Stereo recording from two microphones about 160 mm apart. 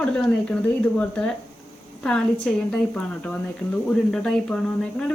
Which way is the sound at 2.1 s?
5° left (ahead or behind).